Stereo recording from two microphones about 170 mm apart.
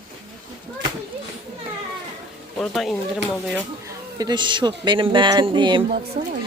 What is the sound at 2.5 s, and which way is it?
Speech, centre (ahead or behind).